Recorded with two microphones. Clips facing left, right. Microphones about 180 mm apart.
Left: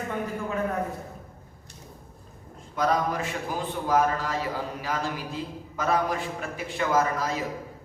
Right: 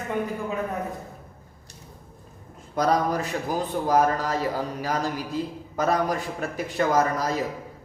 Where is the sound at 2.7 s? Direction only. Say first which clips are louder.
Right 3 dB; 40° right (ahead or behind).